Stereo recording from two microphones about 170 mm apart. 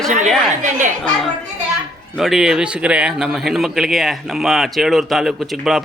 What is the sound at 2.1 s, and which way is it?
A man's voice, centre (ahead or behind).